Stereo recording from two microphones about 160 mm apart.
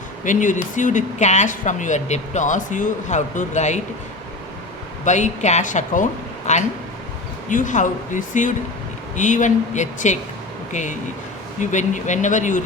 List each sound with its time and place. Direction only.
0.3 s speech: 50° left (ahead or behind)
5.0 s speech: 50° left (ahead or behind)